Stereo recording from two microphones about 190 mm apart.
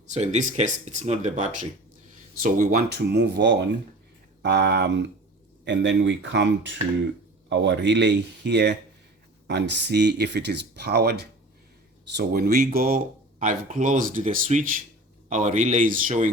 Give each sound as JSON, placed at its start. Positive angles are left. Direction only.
{"t": 0.1, "sound": "speech", "side_deg": -35}